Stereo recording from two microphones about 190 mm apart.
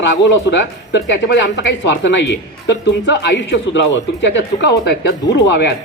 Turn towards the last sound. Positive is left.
turn(degrees=65)  # may be behind; listen again after turning